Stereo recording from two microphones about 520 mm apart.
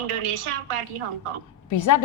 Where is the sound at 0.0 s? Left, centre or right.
Right.